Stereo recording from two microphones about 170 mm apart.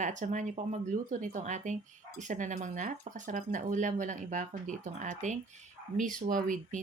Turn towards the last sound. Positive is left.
turn(degrees=-50)  # may be behind; listen again after turning